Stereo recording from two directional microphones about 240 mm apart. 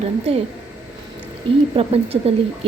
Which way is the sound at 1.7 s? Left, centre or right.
Right.